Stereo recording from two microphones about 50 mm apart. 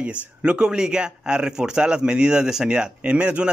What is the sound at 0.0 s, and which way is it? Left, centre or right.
Speech, right.